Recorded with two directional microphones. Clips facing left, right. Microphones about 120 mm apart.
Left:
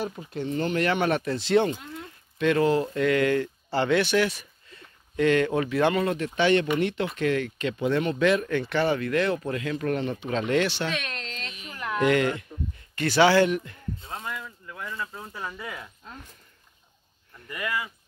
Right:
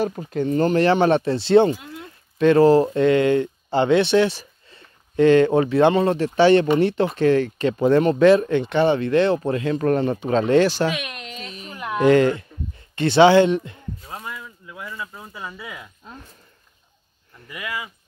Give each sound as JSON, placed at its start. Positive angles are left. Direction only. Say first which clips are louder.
{"t": 0.0, "sound": "speech", "louder": "right 8 dB", "side_deg": -45}
{"t": 10.9, "sound": "a sound", "louder": "right 4 dB", "side_deg": -10}
{"t": 12.0, "sound": "speech", "louder": "right 7 dB", "side_deg": -30}
{"t": 14.1, "sound": "speech", "louder": "right 1 dB", "side_deg": -10}
{"t": 17.5, "sound": "speech", "louder": "even", "side_deg": -10}